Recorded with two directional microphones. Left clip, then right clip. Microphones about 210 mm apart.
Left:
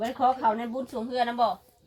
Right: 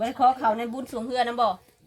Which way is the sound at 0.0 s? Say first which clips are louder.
Right 3 dB; 55° right (ahead or behind).